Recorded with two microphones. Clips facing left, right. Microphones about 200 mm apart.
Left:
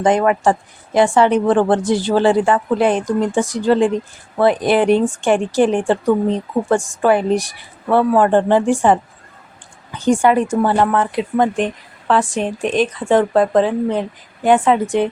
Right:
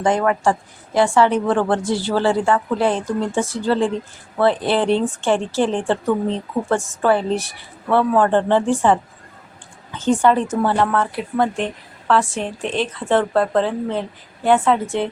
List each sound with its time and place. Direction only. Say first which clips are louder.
0.0 s a woman's voice: left 3 dB; 20° left (ahead or behind)